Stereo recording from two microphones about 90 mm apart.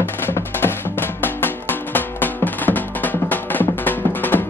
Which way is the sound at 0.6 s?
25° left (ahead or behind).